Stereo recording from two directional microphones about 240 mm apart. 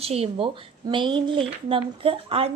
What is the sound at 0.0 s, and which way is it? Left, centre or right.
Speech, right.